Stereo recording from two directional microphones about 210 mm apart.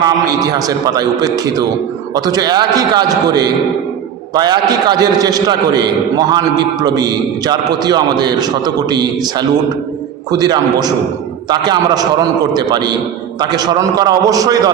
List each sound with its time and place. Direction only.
0.0 s a man's voice: 20° right (ahead or behind)
10.3 s a man's voice: 20° right (ahead or behind)